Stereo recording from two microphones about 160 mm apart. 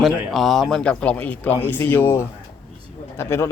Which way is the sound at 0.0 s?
Centre (ahead or behind).